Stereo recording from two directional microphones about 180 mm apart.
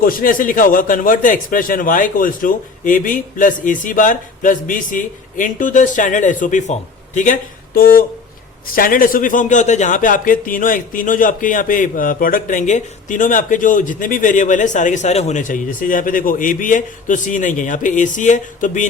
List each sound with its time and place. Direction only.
0.0 s a man's voice: 50° left (ahead or behind)
7.8 s a man's voice: 55° left (ahead or behind)